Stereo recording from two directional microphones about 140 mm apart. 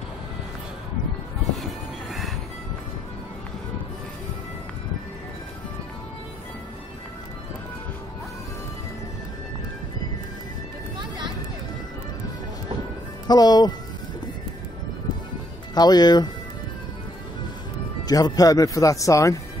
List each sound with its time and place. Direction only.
11.0 s music: 30° right (ahead or behind)
13.3 s speech: 30° left (ahead or behind)
15.7 s speech: 30° left (ahead or behind)
18.0 s speech: 30° left (ahead or behind)